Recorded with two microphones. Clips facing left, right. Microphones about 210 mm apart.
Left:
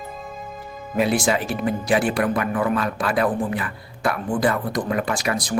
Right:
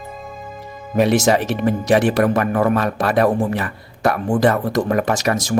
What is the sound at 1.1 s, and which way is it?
Speech, 40° right (ahead or behind).